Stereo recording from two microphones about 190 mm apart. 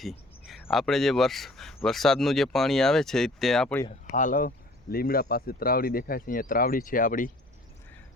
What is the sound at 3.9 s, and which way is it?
Speech, 40° left (ahead or behind).